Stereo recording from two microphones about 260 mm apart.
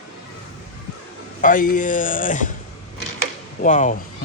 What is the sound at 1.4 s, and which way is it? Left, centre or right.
Speech, left.